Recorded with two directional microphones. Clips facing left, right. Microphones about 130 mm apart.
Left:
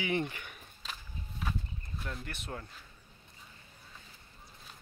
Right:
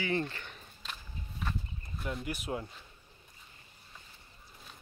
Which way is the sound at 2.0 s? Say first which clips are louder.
Right 6 dB; 10° right (ahead or behind).